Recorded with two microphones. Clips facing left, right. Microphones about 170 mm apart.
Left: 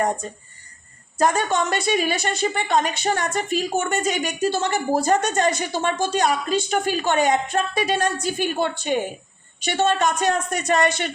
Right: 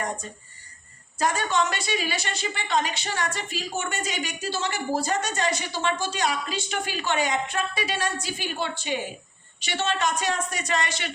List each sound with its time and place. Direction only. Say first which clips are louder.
1.2 s speech: left 4 dB; 50° left (ahead or behind)